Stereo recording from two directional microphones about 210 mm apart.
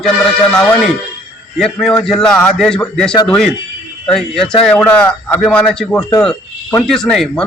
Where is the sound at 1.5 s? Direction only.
Centre (ahead or behind).